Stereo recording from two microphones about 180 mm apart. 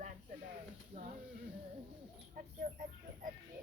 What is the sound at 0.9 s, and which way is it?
Speech, 30° right (ahead or behind).